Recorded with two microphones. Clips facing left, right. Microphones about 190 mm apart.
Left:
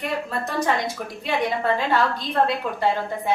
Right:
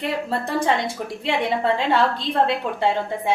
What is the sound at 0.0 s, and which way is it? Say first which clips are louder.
A woman's voice: right 2 dB; 30° right (ahead or behind).